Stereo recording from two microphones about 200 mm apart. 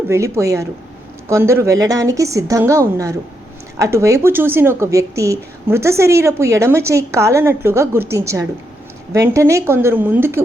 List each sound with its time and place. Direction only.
0.1 s speech: 15° right (ahead or behind)